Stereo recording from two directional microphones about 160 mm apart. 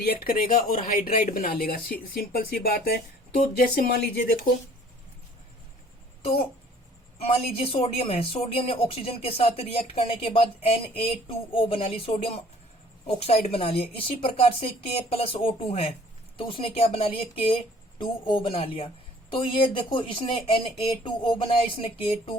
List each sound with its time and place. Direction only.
0.0 s speech: 75° left (ahead or behind)
7.2 s speech: 35° left (ahead or behind)